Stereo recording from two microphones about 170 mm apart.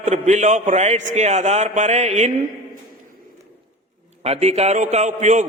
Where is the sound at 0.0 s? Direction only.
45° right (ahead or behind).